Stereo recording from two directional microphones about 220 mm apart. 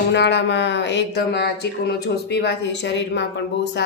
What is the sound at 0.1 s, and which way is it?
Speech, 50° left (ahead or behind).